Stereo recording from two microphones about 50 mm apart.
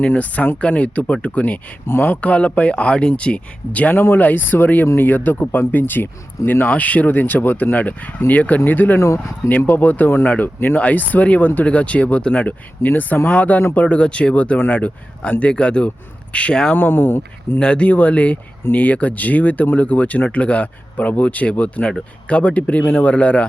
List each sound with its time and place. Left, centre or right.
0.1 s speech: left
3.9 s speech: left
6.7 s speech: left
9.0 s speech: left
9.5 s speech: left
12.8 s speech: left
16.7 s speech: left
17.6 s speech: left